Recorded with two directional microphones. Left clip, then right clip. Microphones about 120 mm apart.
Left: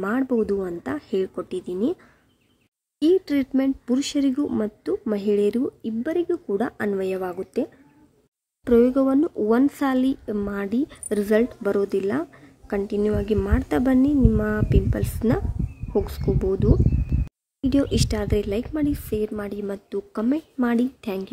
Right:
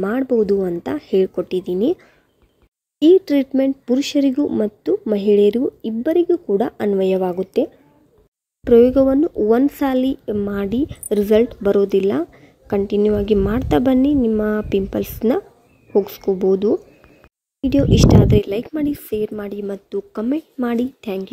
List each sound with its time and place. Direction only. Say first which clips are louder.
0.0 s speech: right 6 dB; 15° right (ahead or behind)
17.6 s speech: right 6 dB; 10° right (ahead or behind)